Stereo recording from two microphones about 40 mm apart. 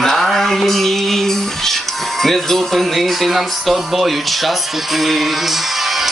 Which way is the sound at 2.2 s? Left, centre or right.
Centre.